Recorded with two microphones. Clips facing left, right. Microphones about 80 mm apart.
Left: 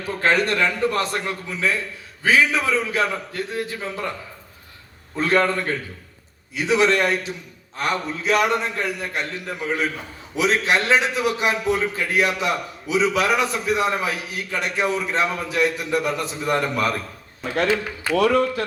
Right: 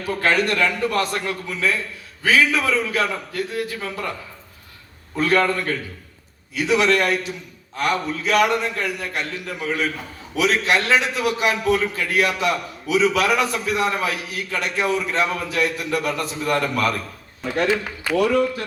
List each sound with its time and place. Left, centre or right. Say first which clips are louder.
0.1 s a man's voice: even; left
5.1 s a man's voice: right 1 dB; left
18.2 s speech: left 1 dB; left